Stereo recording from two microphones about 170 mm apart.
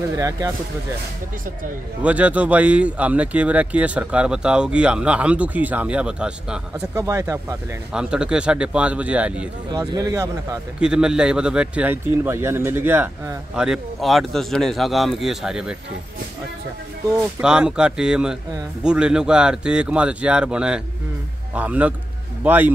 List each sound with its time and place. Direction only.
0.1 s speech: 20° right (ahead or behind)
2.0 s a man's voice: 10° right (ahead or behind)
7.9 s a man's voice: 5° right (ahead or behind)
9.7 s speech: 20° right (ahead or behind)
10.8 s speech: 5° right (ahead or behind)
17.4 s a man's voice: 5° right (ahead or behind)